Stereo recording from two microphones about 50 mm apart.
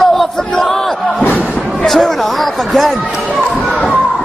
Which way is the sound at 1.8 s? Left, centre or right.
Centre.